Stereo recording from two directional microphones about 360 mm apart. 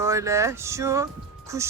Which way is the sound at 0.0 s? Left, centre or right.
Centre.